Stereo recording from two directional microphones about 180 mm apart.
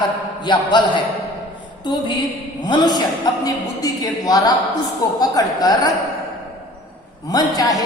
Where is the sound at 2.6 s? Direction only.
25° left (ahead or behind).